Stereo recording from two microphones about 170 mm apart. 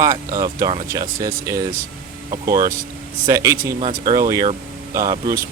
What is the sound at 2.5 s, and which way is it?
Speech, 55° right (ahead or behind).